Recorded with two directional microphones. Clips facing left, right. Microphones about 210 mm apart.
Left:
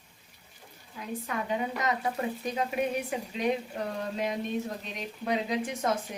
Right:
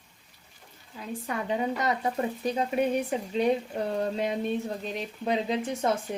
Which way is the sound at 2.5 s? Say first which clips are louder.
Right 5 dB; 30° right (ahead or behind).